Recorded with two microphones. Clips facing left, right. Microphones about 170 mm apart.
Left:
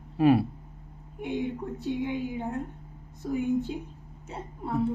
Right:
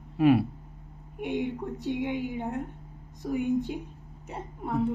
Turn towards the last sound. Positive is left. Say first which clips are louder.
# even
turn(degrees=-15)  # may be behind; listen again after turning